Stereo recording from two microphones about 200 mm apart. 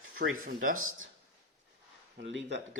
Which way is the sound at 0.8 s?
90° right.